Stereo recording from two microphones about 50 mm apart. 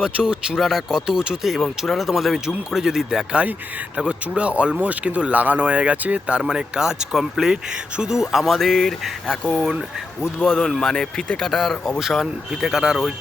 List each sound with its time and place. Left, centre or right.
0.0 s speech: centre
0.6 s speech: centre
1.0 s speech: centre
1.5 s speech: centre
3.9 s speech: right
6.4 s speech: centre
11.9 s speech: centre